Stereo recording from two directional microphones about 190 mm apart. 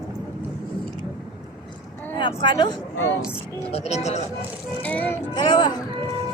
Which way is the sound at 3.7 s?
35° left (ahead or behind).